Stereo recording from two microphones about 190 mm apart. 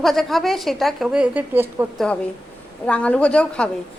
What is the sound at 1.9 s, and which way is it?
A woman's voice, 5° left (ahead or behind).